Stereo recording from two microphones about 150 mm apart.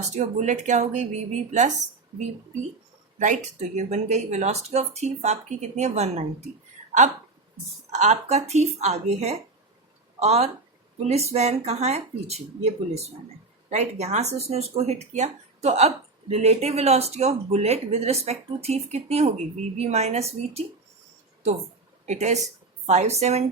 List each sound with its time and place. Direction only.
0.2 s speech: 50° right (ahead or behind)
3.2 s speech: 55° right (ahead or behind)
7.9 s speech: 50° right (ahead or behind)
22.0 s speech: 50° right (ahead or behind)